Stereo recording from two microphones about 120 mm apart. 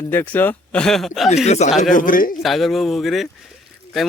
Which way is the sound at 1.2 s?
70° left (ahead or behind).